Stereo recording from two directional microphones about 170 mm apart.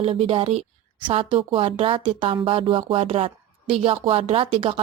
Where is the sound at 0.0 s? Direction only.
35° right (ahead or behind).